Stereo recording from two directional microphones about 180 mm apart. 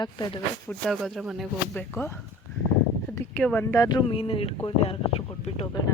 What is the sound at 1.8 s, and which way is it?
Speech, 10° left (ahead or behind).